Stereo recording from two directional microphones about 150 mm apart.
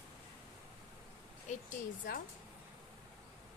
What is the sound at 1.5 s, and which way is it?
Speech, 55° left (ahead or behind).